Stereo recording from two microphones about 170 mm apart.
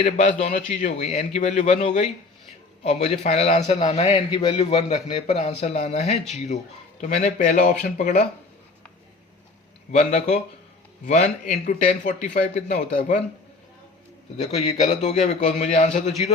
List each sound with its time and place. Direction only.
0.2 s a man's voice: 45° left (ahead or behind)
9.9 s speech: 45° left (ahead or behind)
14.4 s a man's voice: 40° left (ahead or behind)